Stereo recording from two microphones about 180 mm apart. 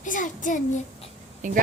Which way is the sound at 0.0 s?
45° left (ahead or behind).